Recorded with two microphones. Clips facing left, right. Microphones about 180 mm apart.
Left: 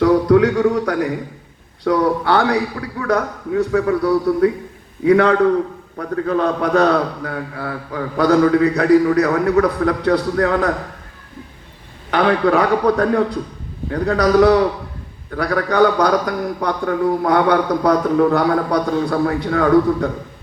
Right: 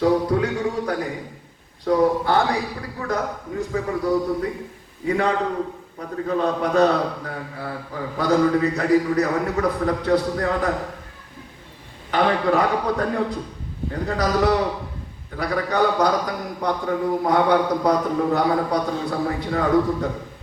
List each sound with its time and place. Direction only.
0.0 s a sound: 70° left (ahead or behind)
1.8 s a man's voice: 70° left (ahead or behind)
12.1 s a man's voice: 70° left (ahead or behind)